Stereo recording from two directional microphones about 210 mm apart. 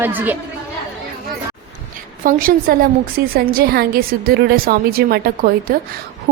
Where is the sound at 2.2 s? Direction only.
40° right (ahead or behind).